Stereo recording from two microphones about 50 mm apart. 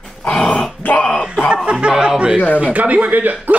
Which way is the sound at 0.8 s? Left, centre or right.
Left.